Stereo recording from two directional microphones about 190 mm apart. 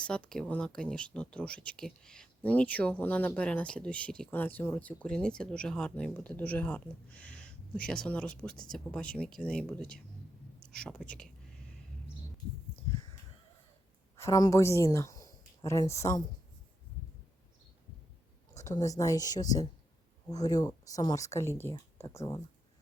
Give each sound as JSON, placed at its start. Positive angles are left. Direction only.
{"t": 0.0, "sound": "speech", "side_deg": 5}
{"t": 14.2, "sound": "speech", "side_deg": 20}
{"t": 18.5, "sound": "speech", "side_deg": 15}